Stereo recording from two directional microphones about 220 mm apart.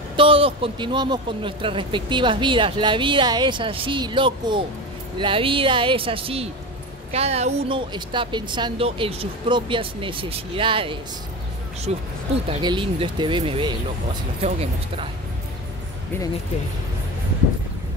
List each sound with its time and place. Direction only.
0.1 s speech: 25° right (ahead or behind)